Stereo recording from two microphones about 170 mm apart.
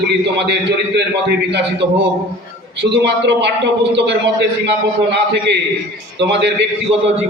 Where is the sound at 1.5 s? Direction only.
90° right.